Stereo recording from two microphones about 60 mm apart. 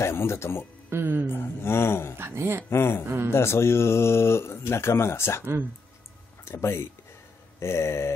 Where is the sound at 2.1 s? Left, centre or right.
Right.